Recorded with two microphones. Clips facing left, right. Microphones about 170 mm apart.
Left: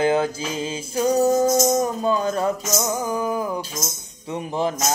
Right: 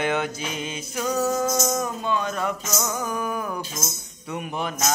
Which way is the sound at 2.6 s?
20° left (ahead or behind).